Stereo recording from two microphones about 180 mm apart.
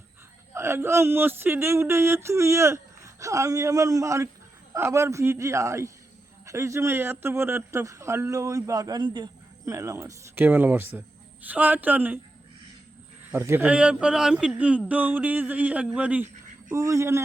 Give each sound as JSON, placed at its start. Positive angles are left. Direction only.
{"t": 0.5, "sound": "speech", "side_deg": -15}
{"t": 13.3, "sound": "speech", "side_deg": -10}